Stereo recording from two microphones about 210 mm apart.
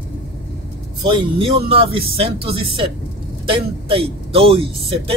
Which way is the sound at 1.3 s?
25° right (ahead or behind).